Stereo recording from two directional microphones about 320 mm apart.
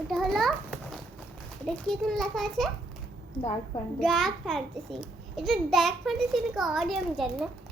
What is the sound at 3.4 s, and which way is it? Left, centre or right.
Speech, left.